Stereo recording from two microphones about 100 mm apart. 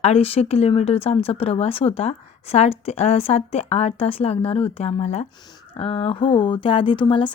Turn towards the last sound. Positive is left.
turn(degrees=55)  # may be behind; listen again after turning